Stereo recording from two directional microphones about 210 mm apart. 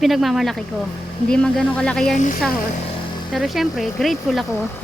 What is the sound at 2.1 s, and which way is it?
Speech, 40° left (ahead or behind).